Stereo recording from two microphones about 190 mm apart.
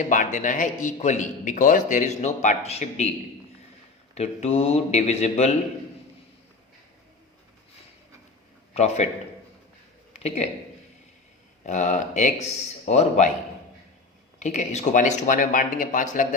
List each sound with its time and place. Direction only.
0.0 s a man's voice: 45° left (ahead or behind)
4.1 s a man's voice: 35° left (ahead or behind)
8.7 s a man's voice: 35° left (ahead or behind)
10.1 s a sound: 35° left (ahead or behind)
11.6 s a man's voice: 40° left (ahead or behind)
14.3 s a man's voice: 40° left (ahead or behind)